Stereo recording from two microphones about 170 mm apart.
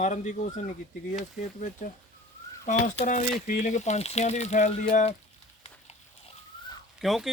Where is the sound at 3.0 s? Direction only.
45° left (ahead or behind).